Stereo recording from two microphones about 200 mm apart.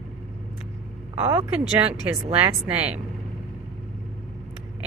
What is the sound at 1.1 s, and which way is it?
Speech, 25° right (ahead or behind).